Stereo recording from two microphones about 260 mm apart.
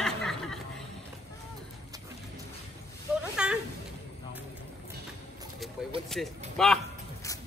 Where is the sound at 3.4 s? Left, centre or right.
Centre.